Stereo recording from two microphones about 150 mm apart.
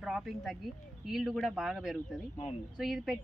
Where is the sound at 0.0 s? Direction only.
Centre (ahead or behind).